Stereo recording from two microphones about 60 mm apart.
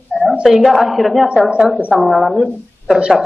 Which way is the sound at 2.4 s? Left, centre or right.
Centre.